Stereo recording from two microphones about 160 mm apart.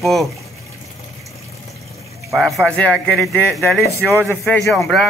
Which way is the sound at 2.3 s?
Centre (ahead or behind).